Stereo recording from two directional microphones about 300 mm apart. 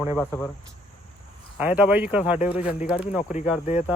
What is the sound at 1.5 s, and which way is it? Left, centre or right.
Speech, centre.